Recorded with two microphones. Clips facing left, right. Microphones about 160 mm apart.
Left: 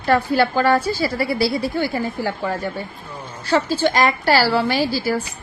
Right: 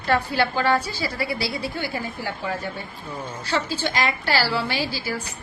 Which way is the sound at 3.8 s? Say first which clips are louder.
Left 7 dB; 45° left (ahead or behind).